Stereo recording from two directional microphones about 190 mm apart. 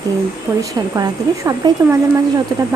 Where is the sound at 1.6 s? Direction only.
20° right (ahead or behind).